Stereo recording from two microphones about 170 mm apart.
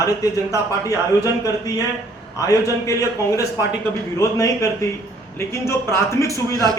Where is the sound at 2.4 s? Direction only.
20° left (ahead or behind).